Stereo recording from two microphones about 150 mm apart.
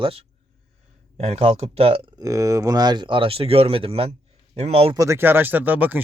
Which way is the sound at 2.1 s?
20° right (ahead or behind).